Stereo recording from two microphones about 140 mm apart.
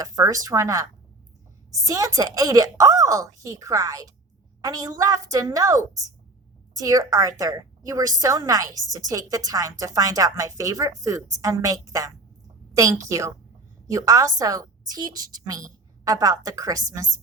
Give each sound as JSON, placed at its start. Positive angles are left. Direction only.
{"t": 0.0, "sound": "a woman's voice", "side_deg": -25}